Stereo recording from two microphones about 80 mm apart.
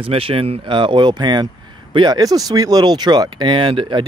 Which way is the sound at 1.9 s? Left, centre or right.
Right.